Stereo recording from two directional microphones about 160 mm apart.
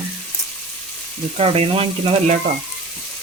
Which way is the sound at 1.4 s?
35° right (ahead or behind).